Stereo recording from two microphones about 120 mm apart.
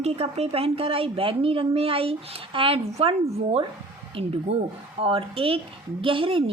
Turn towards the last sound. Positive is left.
turn(degrees=-50)  # may be behind; listen again after turning